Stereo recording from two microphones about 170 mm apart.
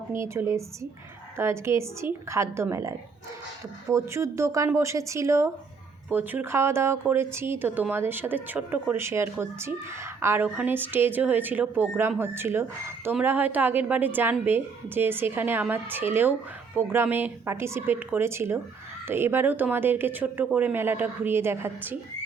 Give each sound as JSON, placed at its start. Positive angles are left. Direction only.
{"t": 0.1, "sound": "speech", "side_deg": -15}